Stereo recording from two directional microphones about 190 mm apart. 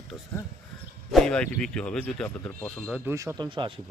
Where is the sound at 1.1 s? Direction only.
Centre (ahead or behind).